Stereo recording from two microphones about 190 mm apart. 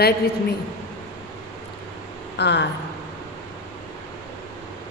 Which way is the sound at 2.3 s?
65° left (ahead or behind).